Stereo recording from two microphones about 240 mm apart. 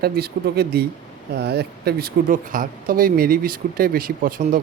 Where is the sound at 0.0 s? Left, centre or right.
Right.